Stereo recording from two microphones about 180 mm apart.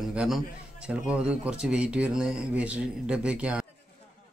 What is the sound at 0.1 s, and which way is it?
A man's voice, 5° right (ahead or behind).